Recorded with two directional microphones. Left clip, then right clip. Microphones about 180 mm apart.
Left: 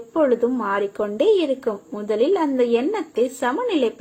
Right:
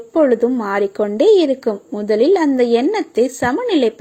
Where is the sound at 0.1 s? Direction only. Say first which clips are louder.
Right 5 dB; 35° right (ahead or behind).